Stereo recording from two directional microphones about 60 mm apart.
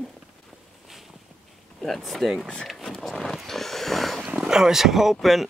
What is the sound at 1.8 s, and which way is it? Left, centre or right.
Speech, centre.